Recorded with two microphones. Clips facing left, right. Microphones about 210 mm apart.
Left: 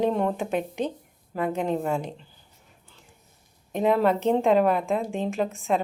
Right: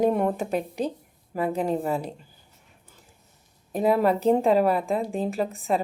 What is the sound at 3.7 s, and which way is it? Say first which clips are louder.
A woman's voice: even; 5° right (ahead or behind).